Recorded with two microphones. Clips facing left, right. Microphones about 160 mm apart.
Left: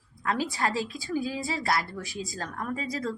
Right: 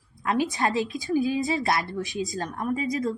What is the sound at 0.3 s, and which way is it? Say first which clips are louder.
A woman's voice: right 4 dB; 20° right (ahead or behind).